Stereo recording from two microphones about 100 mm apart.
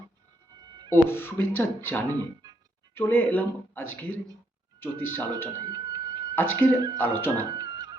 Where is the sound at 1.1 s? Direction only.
20° left (ahead or behind).